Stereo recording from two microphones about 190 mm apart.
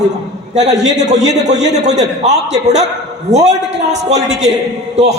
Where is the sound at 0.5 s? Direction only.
35° right (ahead or behind).